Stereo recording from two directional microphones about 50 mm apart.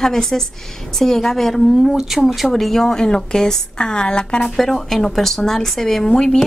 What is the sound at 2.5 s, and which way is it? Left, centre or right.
Speech, centre.